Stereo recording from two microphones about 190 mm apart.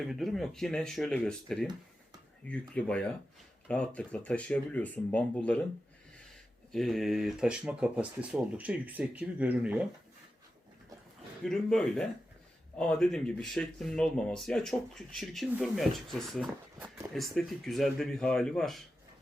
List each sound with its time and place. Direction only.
0.0 s speech: centre (ahead or behind)
6.7 s speech: centre (ahead or behind)
11.4 s speech: 5° left (ahead or behind)